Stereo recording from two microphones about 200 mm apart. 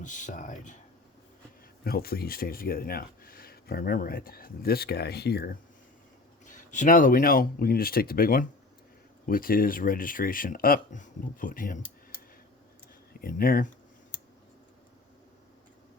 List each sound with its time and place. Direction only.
0.0 s speech: 40° left (ahead or behind)
1.8 s speech: 50° left (ahead or behind)
6.4 s speech: 40° left (ahead or behind)
13.2 s speech: 45° left (ahead or behind)